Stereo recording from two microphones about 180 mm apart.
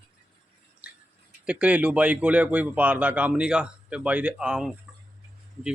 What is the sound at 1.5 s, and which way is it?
Speech, 5° right (ahead or behind).